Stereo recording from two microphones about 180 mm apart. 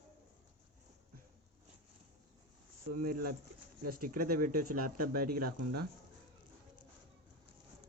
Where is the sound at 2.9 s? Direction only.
55° right (ahead or behind).